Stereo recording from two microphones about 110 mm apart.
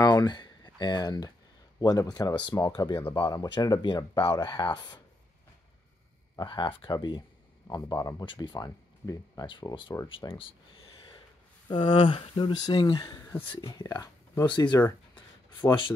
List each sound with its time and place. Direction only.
0.0 s speech: 40° left (ahead or behind)
3.0 s speech: 20° left (ahead or behind)
3.3 s speech: 35° left (ahead or behind)
6.4 s speech: 50° left (ahead or behind)
7.6 s speech: 35° left (ahead or behind)
8.3 s speech: 45° left (ahead or behind)
9.5 s speech: 45° left (ahead or behind)
10.0 s a sound: 50° left (ahead or behind)
11.7 s speech: 45° left (ahead or behind)